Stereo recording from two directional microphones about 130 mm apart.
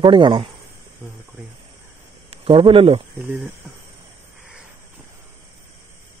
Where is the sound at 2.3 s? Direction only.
45° right (ahead or behind).